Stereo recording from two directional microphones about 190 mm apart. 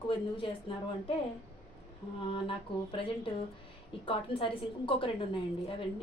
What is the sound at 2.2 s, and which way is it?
A woman's voice, 25° left (ahead or behind).